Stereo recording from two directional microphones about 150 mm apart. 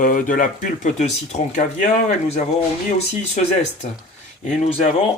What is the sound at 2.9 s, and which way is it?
Speech, 45° left (ahead or behind).